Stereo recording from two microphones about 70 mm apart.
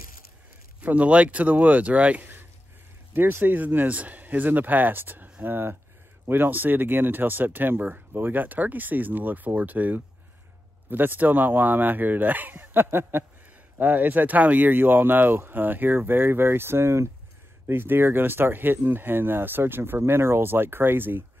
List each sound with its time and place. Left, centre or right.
0.7 s speech: centre